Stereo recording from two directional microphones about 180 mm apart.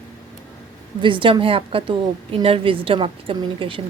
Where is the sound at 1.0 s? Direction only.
25° right (ahead or behind).